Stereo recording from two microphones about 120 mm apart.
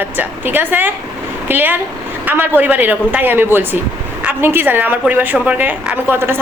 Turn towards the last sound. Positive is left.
turn(degrees=-20)  # may be behind; listen again after turning